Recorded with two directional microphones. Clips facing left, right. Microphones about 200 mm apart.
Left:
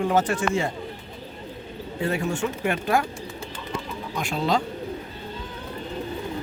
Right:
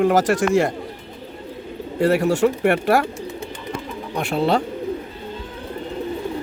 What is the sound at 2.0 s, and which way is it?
Speech, 75° right (ahead or behind).